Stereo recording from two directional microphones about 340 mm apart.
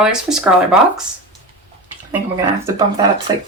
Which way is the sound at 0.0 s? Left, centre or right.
Centre.